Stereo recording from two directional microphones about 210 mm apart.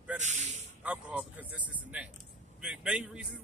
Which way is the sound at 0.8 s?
5° right (ahead or behind).